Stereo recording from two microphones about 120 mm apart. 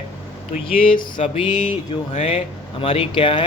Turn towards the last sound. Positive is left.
turn(degrees=45)  # may be behind; listen again after turning